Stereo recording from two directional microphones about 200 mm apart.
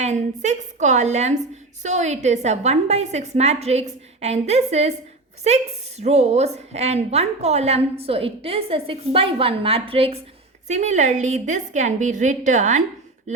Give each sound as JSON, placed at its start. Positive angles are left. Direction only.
{"t": 0.0, "sound": "a woman's voice", "side_deg": -35}
{"t": 6.0, "sound": "a woman's voice", "side_deg": -35}